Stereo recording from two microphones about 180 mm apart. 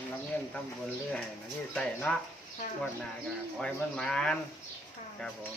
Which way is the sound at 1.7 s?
5° left (ahead or behind).